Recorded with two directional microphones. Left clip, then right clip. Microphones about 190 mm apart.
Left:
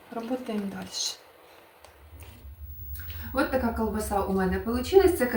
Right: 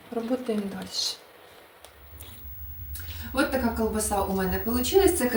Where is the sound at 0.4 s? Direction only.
25° right (ahead or behind).